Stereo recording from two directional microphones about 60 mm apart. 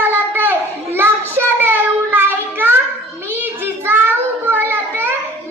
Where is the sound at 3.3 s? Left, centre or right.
Right.